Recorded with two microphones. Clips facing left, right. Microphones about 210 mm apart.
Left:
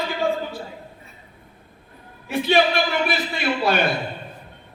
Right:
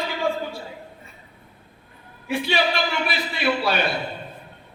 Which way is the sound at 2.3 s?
50° left (ahead or behind).